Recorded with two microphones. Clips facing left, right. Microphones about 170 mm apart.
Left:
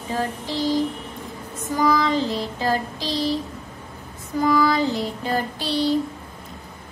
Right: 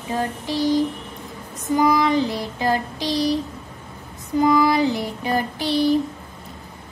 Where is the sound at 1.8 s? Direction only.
20° right (ahead or behind).